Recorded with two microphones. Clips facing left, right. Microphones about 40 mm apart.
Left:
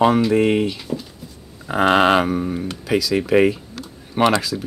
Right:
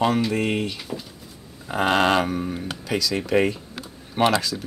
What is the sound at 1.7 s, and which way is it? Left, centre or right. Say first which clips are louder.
Speech: left 5 dB; centre.